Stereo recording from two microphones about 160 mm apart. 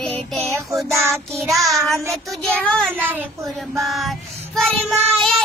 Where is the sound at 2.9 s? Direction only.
10° right (ahead or behind).